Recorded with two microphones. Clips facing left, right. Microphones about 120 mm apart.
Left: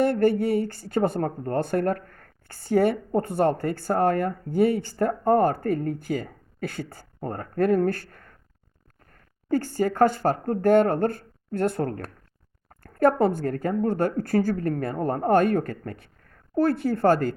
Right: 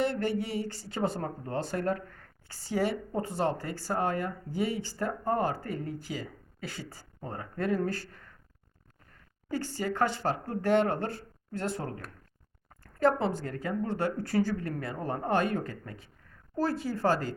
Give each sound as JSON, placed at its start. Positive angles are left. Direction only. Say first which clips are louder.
{"t": 0.0, "sound": "speech", "louder": "left 9 dB", "side_deg": 50}
{"t": 9.5, "sound": "speech", "louder": "left 8 dB", "side_deg": 50}